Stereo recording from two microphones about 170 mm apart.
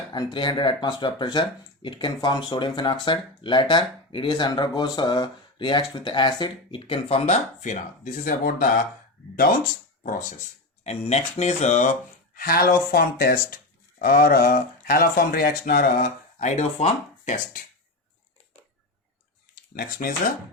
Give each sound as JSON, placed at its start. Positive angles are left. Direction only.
{"t": 0.1, "sound": "speech", "side_deg": 25}
{"t": 10.0, "sound": "speech", "side_deg": 50}
{"t": 10.8, "sound": "speech", "side_deg": 40}
{"t": 12.3, "sound": "speech", "side_deg": 60}
{"t": 19.7, "sound": "speech", "side_deg": 60}